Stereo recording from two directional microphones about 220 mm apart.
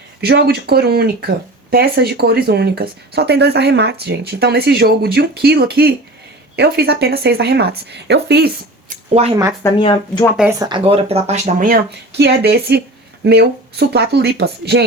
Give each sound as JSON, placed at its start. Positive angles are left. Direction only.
{"t": 0.2, "sound": "speech", "side_deg": -45}
{"t": 9.3, "sound": "speech", "side_deg": -15}
{"t": 9.6, "sound": "speech", "side_deg": 20}
{"t": 10.6, "sound": "speech", "side_deg": -20}